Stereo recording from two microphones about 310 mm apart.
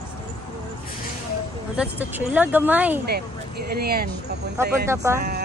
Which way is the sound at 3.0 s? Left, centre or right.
Right.